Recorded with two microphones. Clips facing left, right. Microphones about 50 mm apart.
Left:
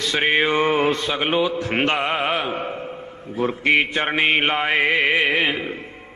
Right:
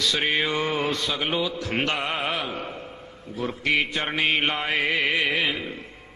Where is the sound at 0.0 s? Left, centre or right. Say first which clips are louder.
Left 5 dB; left.